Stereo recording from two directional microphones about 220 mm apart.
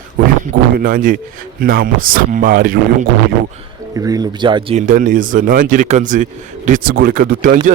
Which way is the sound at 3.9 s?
15° right (ahead or behind).